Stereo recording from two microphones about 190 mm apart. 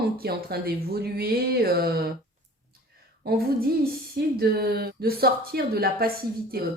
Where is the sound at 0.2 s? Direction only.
55° right (ahead or behind).